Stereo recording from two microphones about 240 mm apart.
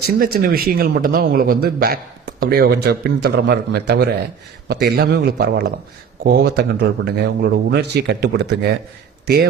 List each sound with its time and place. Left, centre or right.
0.2 s speech: right